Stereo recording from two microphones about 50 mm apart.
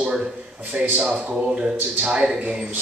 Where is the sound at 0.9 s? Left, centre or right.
Centre.